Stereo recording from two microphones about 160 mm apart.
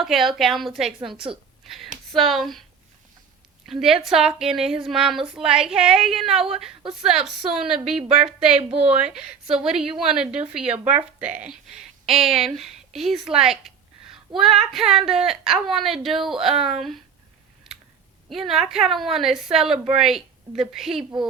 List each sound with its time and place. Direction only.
0.0 s a woman's voice: centre (ahead or behind)
3.7 s a woman's voice: centre (ahead or behind)
8.5 s speech: 40° right (ahead or behind)
9.1 s a woman's voice: 5° right (ahead or behind)
18.3 s a woman's voice: centre (ahead or behind)